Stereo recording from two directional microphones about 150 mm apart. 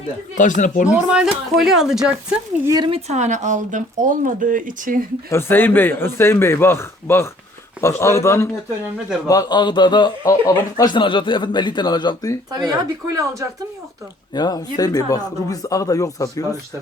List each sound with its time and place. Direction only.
0.3 s speech: 55° left (ahead or behind)
0.9 s speech: 5° right (ahead or behind)
2.6 s speech: 25° right (ahead or behind)
2.9 s speech: 50° right (ahead or behind)
5.3 s a man's voice: 15° left (ahead or behind)
12.5 s speech: 25° right (ahead or behind)
14.3 s a man's voice: 25° left (ahead or behind)